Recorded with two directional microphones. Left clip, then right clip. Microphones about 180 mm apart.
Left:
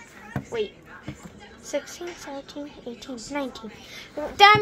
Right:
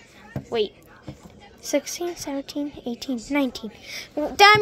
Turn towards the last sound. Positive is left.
turn(degrees=-50)  # may be behind; listen again after turning